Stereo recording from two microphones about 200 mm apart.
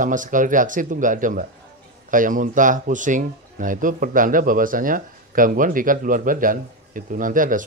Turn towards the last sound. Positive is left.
turn(degrees=-40)  # may be behind; listen again after turning